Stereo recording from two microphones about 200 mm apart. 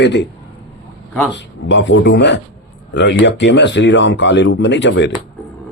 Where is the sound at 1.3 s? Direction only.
65° left (ahead or behind).